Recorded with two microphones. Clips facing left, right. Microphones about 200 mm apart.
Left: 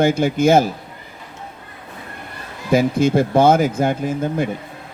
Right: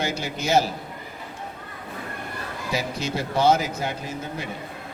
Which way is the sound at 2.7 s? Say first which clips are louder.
Left 13 dB; 50° left (ahead or behind).